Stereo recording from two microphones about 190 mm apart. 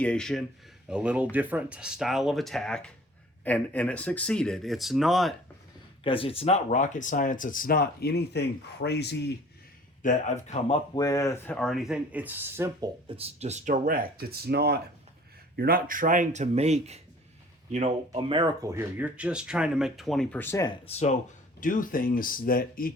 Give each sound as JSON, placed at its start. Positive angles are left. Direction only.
{"t": 0.0, "sound": "speech", "side_deg": 5}
{"t": 6.0, "sound": "speech", "side_deg": 30}
{"t": 10.0, "sound": "speech", "side_deg": 40}
{"t": 10.9, "sound": "speech", "side_deg": 20}
{"t": 11.5, "sound": "speech", "side_deg": 0}
{"t": 13.1, "sound": "speech", "side_deg": -30}
{"t": 20.7, "sound": "speech", "side_deg": 35}
{"t": 21.6, "sound": "speech", "side_deg": 45}